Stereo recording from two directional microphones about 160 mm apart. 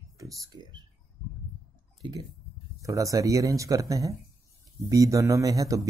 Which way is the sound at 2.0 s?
25° right (ahead or behind).